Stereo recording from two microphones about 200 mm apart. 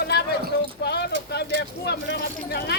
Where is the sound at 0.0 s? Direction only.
55° left (ahead or behind).